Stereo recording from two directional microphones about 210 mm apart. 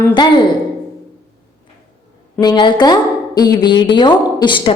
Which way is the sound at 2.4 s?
20° left (ahead or behind).